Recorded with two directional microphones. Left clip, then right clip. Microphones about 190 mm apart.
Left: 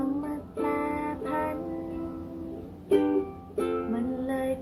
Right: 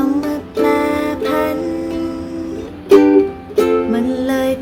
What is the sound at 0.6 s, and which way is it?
Music, 10° right (ahead or behind).